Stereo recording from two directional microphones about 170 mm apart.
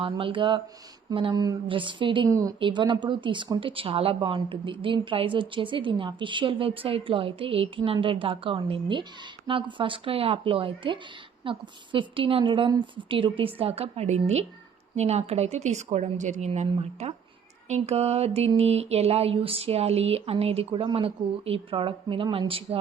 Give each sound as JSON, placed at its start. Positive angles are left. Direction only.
{"t": 0.0, "sound": "a woman's voice", "side_deg": -30}